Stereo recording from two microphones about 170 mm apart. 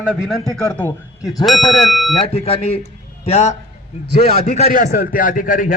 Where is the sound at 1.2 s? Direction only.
20° left (ahead or behind).